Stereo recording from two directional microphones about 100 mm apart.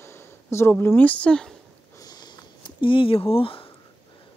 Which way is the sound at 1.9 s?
40° left (ahead or behind).